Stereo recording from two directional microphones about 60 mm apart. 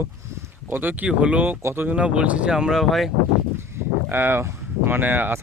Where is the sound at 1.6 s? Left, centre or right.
Right.